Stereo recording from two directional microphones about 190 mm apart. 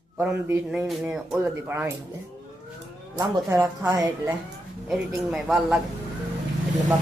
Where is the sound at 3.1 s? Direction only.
15° right (ahead or behind).